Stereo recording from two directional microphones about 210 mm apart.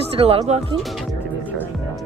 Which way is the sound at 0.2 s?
30° right (ahead or behind).